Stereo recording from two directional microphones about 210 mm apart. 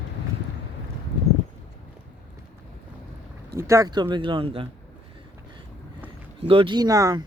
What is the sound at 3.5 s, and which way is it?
Speech, 15° right (ahead or behind).